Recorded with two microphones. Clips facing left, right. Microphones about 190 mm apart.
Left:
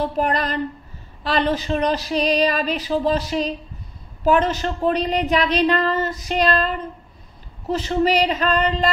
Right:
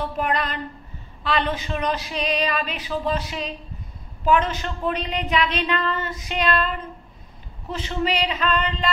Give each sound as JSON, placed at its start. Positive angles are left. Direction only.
{"t": 0.0, "sound": "a woman's voice", "side_deg": 35}
{"t": 7.7, "sound": "a woman's voice", "side_deg": 40}